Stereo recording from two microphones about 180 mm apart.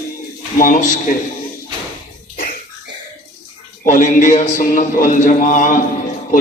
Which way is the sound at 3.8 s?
45° left (ahead or behind).